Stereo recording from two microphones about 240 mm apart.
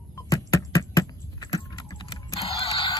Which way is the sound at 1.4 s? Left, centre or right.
Centre.